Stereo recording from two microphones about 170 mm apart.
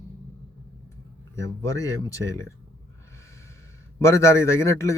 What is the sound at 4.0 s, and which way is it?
Speech, 15° left (ahead or behind).